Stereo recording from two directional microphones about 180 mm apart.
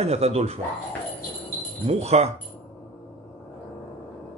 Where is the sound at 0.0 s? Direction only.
35° right (ahead or behind).